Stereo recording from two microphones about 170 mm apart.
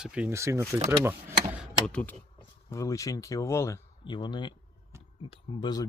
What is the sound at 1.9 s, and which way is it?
Speech, 5° left (ahead or behind).